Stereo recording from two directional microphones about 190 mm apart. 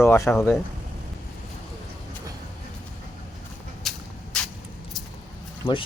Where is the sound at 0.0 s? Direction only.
15° left (ahead or behind).